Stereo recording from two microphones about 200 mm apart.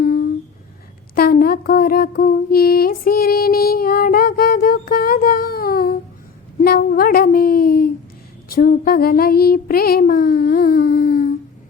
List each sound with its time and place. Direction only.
0.0 s a sound: 45° left (ahead or behind)
1.1 s mantra: 45° left (ahead or behind)
6.6 s speech: 45° left (ahead or behind)
8.4 s child singing: 50° left (ahead or behind)